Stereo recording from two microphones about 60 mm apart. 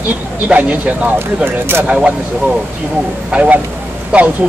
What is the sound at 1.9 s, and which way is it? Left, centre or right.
Speech, right.